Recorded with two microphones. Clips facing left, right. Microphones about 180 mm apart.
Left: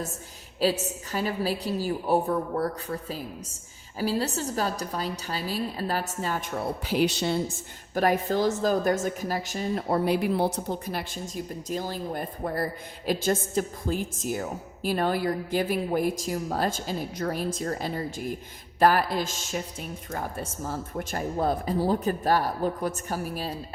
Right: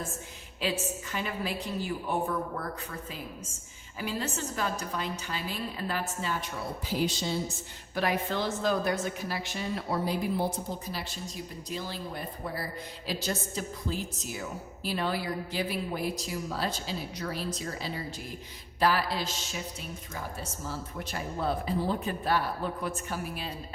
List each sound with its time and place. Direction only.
0.6 s speech: 35° left (ahead or behind)
6.8 s a woman's voice: 70° left (ahead or behind); by 10.0 s 45° left (ahead or behind)
10.0 s a woman's voice: 70° left (ahead or behind); by 23.5 s 40° left (ahead or behind)